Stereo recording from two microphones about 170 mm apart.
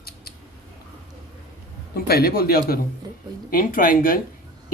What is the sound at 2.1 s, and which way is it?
Speech, 65° left (ahead or behind).